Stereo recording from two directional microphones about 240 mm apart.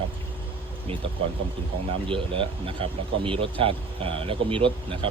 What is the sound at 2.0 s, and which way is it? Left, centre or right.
Speech, right.